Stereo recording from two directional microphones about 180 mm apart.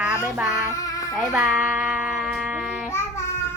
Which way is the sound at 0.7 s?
20° left (ahead or behind).